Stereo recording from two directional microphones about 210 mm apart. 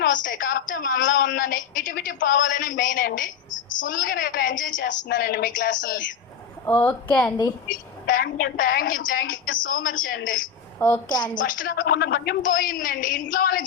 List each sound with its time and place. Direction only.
0.3 s a woman's voice: 40° left (ahead or behind)
6.7 s a woman's voice: 5° left (ahead or behind)
7.7 s a woman's voice: 40° left (ahead or behind)
10.8 s a woman's voice: 10° left (ahead or behind)
11.3 s a woman's voice: 40° left (ahead or behind)